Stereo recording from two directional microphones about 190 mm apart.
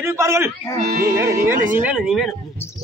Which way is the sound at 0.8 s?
55° right (ahead or behind).